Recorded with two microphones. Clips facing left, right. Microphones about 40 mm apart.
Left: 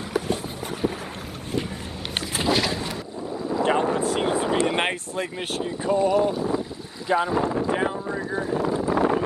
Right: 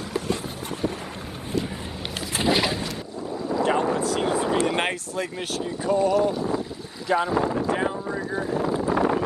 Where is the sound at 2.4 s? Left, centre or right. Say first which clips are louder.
Right 1 dB; centre.